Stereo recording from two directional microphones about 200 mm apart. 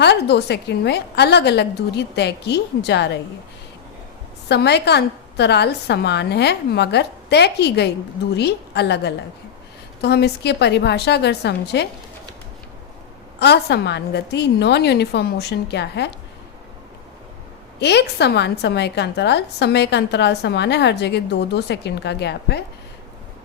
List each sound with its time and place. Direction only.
0.0 s a woman's voice: 55° left (ahead or behind)
4.4 s a woman's voice: 55° left (ahead or behind)
13.4 s a woman's voice: 55° left (ahead or behind)
17.7 s a woman's voice: 60° left (ahead or behind)